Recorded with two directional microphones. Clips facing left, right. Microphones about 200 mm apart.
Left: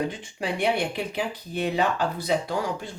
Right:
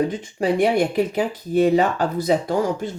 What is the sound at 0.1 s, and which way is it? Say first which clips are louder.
Speech: right 9 dB; 45° right (ahead or behind).